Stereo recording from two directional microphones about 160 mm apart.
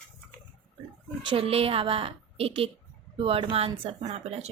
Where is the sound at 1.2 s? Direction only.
35° right (ahead or behind).